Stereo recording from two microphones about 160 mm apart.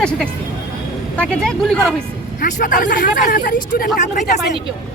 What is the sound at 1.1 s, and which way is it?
Speech, 5° left (ahead or behind).